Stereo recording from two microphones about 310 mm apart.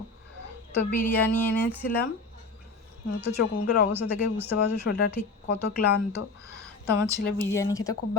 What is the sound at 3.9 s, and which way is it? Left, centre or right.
Speech, centre.